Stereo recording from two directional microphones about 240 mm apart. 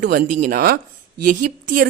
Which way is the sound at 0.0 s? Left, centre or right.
Right.